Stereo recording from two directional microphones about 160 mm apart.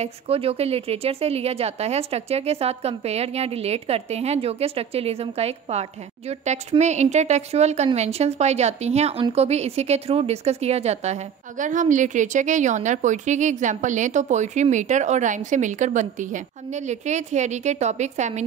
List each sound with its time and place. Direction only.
0.0 s a woman's voice: 40° right (ahead or behind)